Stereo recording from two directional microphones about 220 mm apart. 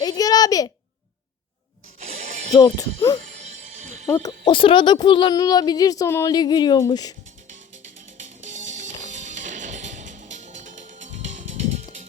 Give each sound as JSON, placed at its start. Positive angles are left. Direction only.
{"t": 0.0, "sound": "a sound", "side_deg": 15}
{"t": 2.0, "sound": "music", "side_deg": -30}
{"t": 2.5, "sound": "speech", "side_deg": 15}
{"t": 3.4, "sound": "music", "side_deg": -35}
{"t": 4.0, "sound": "speech", "side_deg": 15}
{"t": 8.5, "sound": "music", "side_deg": -35}